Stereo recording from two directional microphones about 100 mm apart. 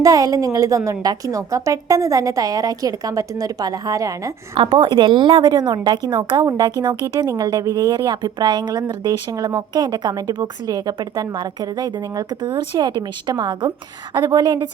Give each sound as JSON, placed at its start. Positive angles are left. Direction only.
{"t": 0.0, "sound": "a woman's voice", "side_deg": -35}
{"t": 4.5, "sound": "a woman's voice", "side_deg": -60}